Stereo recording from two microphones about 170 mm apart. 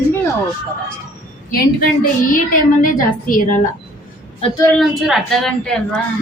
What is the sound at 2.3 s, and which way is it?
A woman's voice, 50° left (ahead or behind).